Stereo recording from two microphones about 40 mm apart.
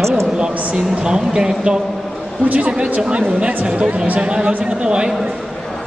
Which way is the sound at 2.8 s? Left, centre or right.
Right.